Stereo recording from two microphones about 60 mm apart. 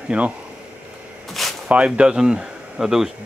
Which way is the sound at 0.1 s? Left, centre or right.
Right.